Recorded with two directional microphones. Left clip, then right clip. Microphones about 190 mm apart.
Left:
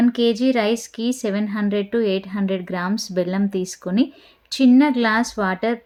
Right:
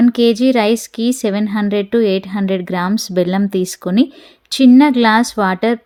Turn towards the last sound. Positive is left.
turn(degrees=-40)  # may be behind; listen again after turning